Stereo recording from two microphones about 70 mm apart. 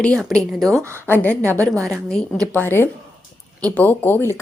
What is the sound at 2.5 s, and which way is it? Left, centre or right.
A woman's voice, left.